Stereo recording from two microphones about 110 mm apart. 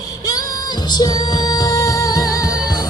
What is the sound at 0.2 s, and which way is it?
Music, 35° left (ahead or behind).